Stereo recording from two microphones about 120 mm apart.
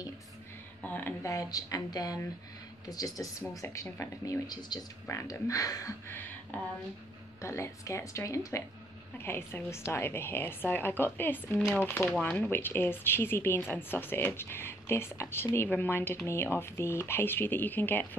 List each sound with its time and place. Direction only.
0.8 s a woman's voice: 15° left (ahead or behind)
1.2 s a woman's voice: 30° left (ahead or behind)
6.5 s a woman's voice: 10° left (ahead or behind)
7.4 s a woman's voice: 25° left (ahead or behind)